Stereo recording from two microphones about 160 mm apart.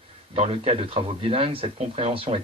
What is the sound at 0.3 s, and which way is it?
Speech, 40° right (ahead or behind).